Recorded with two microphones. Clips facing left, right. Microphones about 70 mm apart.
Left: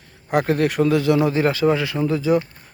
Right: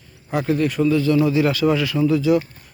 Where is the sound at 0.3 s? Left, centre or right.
Left.